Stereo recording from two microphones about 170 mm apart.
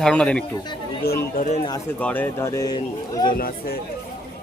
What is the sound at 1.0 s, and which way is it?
Speech, 65° left (ahead or behind).